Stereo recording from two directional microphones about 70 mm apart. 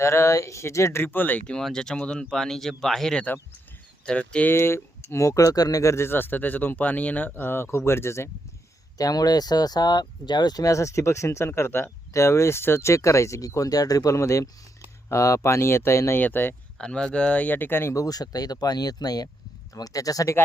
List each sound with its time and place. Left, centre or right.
0.0 s speech: left
1.0 s speech: left
1.5 s speech: centre
4.5 s speech: left
9.0 s speech: left
10.7 s speech: left
16.2 s speech: left
16.7 s speech: centre; by 17.9 s left
17.9 s speech: left
19.7 s speech: left